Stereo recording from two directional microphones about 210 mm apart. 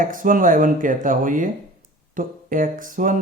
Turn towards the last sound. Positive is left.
turn(degrees=-40)  # may be behind; listen again after turning